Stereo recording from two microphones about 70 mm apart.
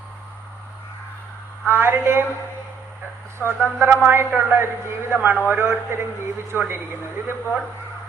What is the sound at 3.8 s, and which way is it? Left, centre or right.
A man's voice, right.